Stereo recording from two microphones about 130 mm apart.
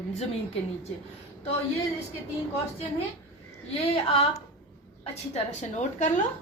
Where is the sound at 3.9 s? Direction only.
45° left (ahead or behind).